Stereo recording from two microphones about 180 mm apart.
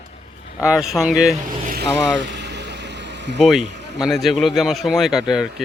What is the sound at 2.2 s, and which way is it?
Vehicle, 70° right (ahead or behind).